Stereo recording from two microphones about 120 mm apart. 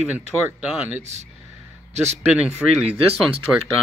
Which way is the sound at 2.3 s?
10° right (ahead or behind).